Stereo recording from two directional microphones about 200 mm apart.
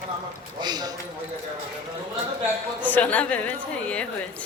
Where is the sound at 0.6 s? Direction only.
20° right (ahead or behind).